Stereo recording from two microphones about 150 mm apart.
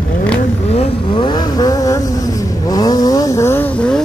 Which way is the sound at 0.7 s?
30° left (ahead or behind).